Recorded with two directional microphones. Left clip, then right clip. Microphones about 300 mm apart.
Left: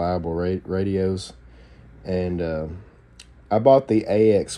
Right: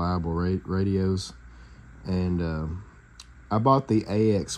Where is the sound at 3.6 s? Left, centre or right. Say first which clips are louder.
Left 6 dB; centre.